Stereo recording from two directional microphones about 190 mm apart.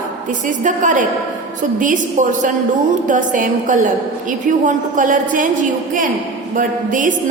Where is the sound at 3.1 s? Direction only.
45° right (ahead or behind).